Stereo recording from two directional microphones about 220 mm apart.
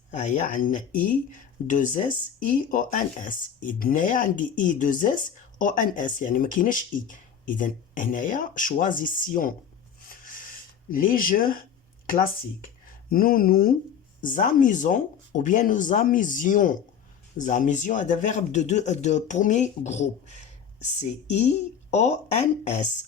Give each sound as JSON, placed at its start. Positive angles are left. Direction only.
{"t": 0.1, "sound": "speech", "side_deg": 35}
{"t": 10.1, "sound": "a sound", "side_deg": 40}
{"t": 12.0, "sound": "speech", "side_deg": 40}